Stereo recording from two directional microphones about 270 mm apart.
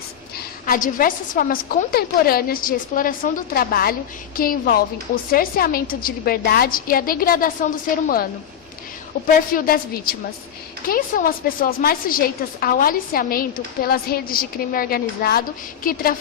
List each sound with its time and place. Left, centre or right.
0.6 s a woman's voice: left